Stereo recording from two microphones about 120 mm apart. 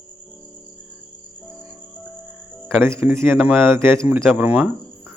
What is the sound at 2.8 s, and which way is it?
Speech, 20° right (ahead or behind).